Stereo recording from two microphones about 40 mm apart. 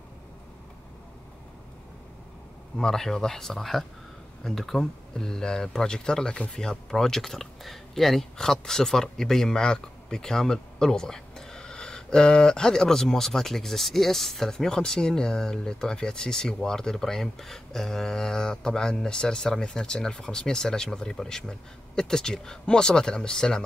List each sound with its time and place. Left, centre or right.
2.8 s speech: centre
14.5 s speech: centre